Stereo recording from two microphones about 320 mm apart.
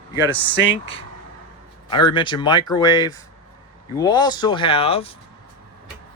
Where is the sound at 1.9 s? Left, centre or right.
Centre.